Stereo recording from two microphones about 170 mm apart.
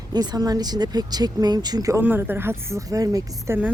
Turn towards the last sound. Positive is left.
turn(degrees=-15)  # may be behind; listen again after turning